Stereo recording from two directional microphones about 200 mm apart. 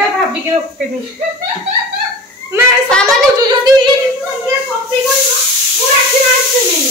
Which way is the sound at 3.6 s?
20° right (ahead or behind).